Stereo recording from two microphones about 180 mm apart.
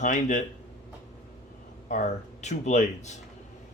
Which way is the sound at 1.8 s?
40° left (ahead or behind).